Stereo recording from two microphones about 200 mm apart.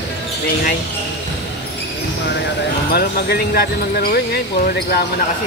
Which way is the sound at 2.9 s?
55° left (ahead or behind).